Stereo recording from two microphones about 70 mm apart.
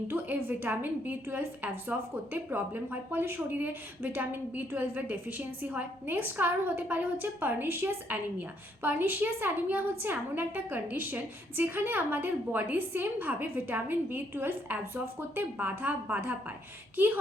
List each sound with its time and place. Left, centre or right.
0.1 s a woman's voice: right